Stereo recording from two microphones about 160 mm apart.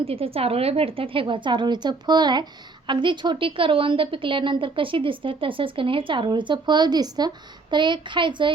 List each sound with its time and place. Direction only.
0.0 s a woman's voice: 35° right (ahead or behind)